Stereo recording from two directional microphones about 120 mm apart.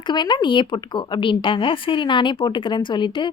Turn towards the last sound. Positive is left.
turn(degrees=40)  # may be behind; listen again after turning